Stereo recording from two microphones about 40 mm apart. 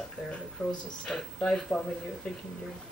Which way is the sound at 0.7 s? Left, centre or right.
Left.